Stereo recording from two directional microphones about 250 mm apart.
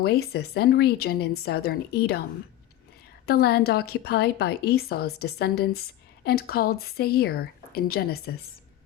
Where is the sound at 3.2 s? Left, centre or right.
Left.